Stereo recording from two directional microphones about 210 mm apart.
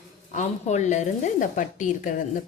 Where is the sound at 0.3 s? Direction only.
35° left (ahead or behind).